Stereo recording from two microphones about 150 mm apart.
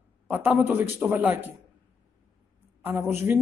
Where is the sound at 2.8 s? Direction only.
15° right (ahead or behind).